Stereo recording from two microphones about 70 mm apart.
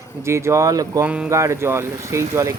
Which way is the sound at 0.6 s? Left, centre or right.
Right.